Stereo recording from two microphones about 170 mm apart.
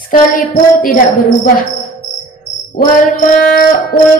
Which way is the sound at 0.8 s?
55° left (ahead or behind).